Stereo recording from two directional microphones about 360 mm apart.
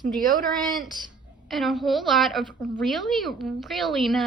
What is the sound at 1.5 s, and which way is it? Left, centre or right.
A woman's voice, centre.